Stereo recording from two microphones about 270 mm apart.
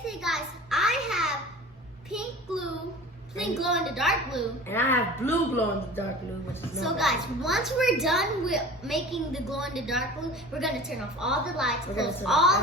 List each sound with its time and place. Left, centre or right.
0.0 s a sound: centre
2.0 s a child's voice: centre
6.5 s a child's voice: centre